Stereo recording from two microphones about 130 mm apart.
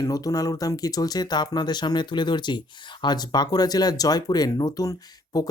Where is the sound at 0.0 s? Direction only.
25° left (ahead or behind).